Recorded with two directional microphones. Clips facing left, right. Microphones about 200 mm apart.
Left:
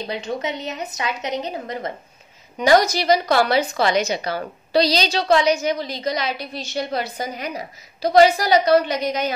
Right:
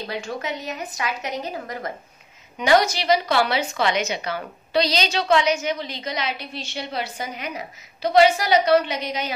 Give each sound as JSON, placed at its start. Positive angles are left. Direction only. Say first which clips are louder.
{"t": 0.0, "sound": "a woman's voice", "louder": "left 3 dB", "side_deg": 20}
{"t": 2.6, "sound": "a woman's voice", "louder": "left 3 dB", "side_deg": 40}